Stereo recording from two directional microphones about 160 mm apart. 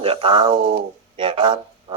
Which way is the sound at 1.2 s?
30° right (ahead or behind).